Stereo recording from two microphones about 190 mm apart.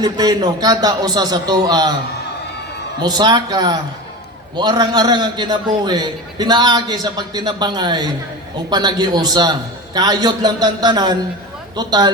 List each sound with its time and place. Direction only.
0.0 s a man's voice: 20° right (ahead or behind)
3.0 s a man's voice: 20° right (ahead or behind)